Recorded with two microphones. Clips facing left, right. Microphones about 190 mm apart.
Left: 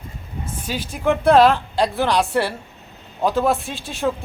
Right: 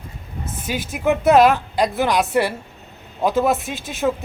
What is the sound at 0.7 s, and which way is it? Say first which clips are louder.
A man's voice: right 1 dB; 5° right (ahead or behind).